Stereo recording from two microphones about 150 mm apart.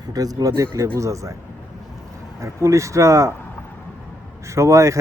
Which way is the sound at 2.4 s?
20° right (ahead or behind).